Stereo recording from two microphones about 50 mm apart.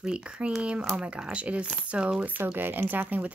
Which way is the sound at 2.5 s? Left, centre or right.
Right.